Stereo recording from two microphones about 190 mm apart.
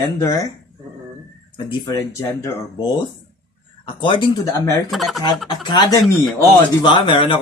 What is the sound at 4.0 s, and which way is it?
Speech, 25° left (ahead or behind).